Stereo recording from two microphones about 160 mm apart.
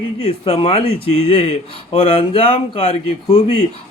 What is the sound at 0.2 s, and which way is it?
A man's voice, 35° left (ahead or behind).